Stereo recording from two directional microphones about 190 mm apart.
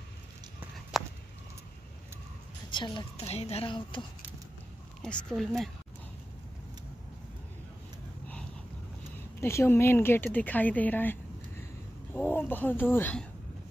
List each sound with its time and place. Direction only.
0.9 s a sound: centre (ahead or behind)
2.7 s a woman's voice: 25° left (ahead or behind)
5.0 s speech: centre (ahead or behind)
9.4 s speech: 15° left (ahead or behind)